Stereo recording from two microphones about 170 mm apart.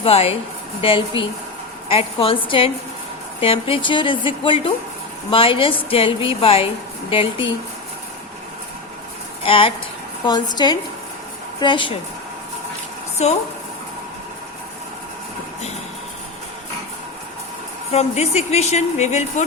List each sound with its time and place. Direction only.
0.0 s a woman's voice: 35° left (ahead or behind)
9.4 s a woman's voice: 30° left (ahead or behind)
17.9 s a woman's voice: 40° left (ahead or behind)